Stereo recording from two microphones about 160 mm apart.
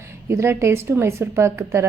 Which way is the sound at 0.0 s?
15° right (ahead or behind).